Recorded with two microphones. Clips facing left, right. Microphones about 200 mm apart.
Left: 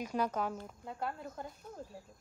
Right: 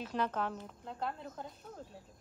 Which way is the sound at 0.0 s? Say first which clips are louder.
Left 1 dB; 10° left (ahead or behind).